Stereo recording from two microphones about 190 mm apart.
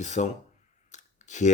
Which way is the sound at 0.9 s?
40° left (ahead or behind).